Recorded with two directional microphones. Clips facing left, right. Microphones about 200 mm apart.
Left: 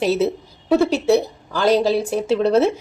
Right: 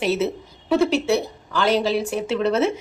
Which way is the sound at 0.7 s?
35° left (ahead or behind).